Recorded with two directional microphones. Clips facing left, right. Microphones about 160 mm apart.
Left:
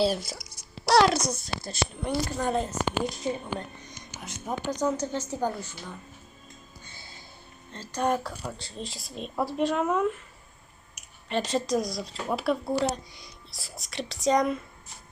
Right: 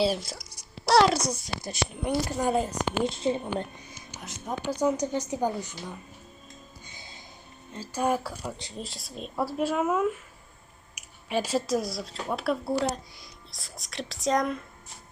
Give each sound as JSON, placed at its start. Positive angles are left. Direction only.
{"t": 0.0, "sound": "a woman's voice", "side_deg": 0}
{"t": 3.0, "sound": "a woman's voice", "side_deg": -25}
{"t": 3.8, "sound": "a woman's voice", "side_deg": -5}
{"t": 6.8, "sound": "music", "side_deg": -15}
{"t": 7.7, "sound": "a woman's voice", "side_deg": -10}